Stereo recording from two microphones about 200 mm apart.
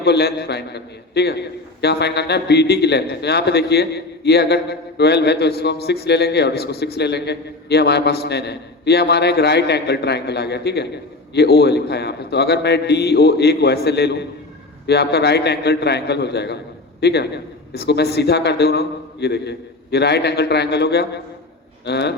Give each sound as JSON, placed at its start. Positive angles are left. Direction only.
{"t": 0.0, "sound": "a man's voice", "side_deg": 55}